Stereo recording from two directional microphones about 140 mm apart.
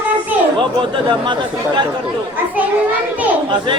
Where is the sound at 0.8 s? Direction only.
35° right (ahead or behind).